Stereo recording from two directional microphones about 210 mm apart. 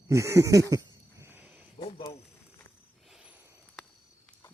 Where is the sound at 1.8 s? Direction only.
25° left (ahead or behind).